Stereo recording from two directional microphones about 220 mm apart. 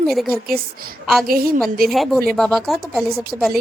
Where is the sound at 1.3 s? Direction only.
45° right (ahead or behind).